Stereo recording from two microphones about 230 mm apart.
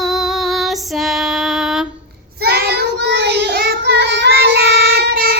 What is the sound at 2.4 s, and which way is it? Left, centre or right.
Child singing, right.